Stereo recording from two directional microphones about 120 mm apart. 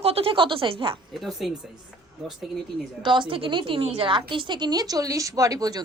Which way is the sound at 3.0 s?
40° right (ahead or behind).